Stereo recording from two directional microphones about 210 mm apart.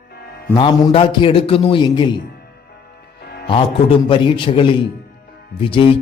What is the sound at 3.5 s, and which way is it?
Speech, 25° left (ahead or behind).